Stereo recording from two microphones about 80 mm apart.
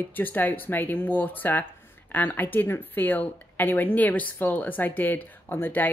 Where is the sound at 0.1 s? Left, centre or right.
Left.